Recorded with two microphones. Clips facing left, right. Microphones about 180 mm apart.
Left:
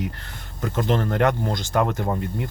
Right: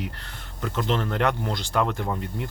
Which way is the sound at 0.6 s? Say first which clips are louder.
Left 3 dB; 45° left (ahead or behind).